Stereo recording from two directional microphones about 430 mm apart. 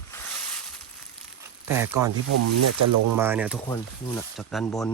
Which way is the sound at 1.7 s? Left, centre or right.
Centre.